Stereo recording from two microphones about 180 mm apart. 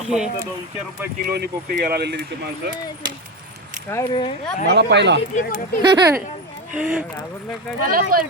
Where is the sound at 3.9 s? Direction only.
15° left (ahead or behind).